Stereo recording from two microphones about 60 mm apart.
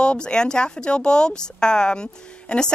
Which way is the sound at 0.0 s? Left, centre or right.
Centre.